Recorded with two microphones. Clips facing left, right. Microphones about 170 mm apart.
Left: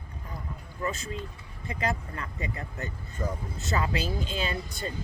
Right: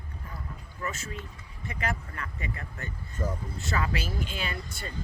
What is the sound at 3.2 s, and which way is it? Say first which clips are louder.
Speech: even; 5° right (ahead or behind).